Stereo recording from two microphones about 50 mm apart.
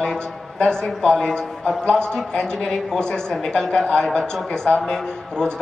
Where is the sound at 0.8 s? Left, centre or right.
Centre.